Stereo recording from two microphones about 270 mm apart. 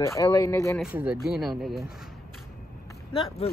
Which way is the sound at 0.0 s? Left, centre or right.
Centre.